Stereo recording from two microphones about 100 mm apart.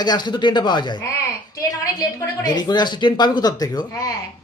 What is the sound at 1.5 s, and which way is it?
A man's voice, 35° left (ahead or behind).